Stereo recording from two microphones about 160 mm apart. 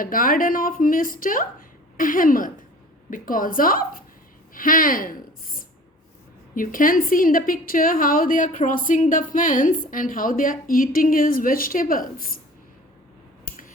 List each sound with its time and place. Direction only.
0.0 s a woman's voice: 60° left (ahead or behind)
6.5 s a woman's voice: 60° left (ahead or behind)
13.4 s a sound: 55° left (ahead or behind)